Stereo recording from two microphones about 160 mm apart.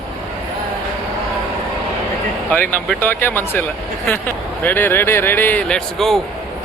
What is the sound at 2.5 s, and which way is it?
A man's voice, 10° left (ahead or behind).